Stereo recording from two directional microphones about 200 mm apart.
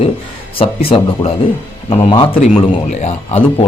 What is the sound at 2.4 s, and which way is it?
A man's voice, 35° left (ahead or behind).